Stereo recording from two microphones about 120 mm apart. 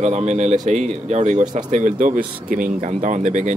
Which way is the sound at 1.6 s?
90° right.